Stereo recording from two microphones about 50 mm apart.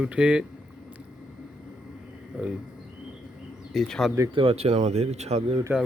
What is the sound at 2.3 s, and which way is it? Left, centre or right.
Speech, centre.